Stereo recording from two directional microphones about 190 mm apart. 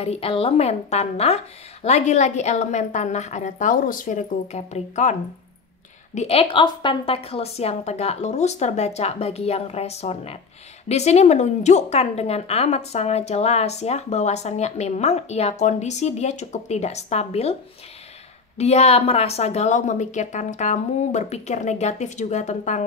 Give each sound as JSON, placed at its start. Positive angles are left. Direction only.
{"t": 0.0, "sound": "a woman's voice", "side_deg": 30}
{"t": 6.1, "sound": "a woman's voice", "side_deg": 30}
{"t": 18.6, "sound": "a woman's voice", "side_deg": 35}